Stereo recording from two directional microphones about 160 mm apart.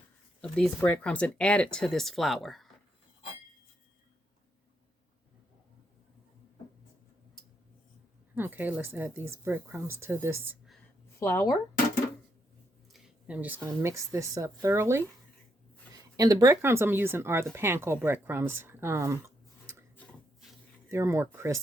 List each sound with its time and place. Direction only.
0.4 s speech: 5° left (ahead or behind)
8.4 s speech: 10° right (ahead or behind)
11.2 s speech: 15° left (ahead or behind)
12.9 s a sound: 5° right (ahead or behind)
13.7 s speech: 20° right (ahead or behind)
16.1 s speech: 25° right (ahead or behind)
20.9 s speech: 15° right (ahead or behind)